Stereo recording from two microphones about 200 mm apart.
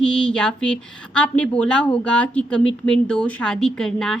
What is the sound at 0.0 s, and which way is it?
A woman's voice, 5° left (ahead or behind).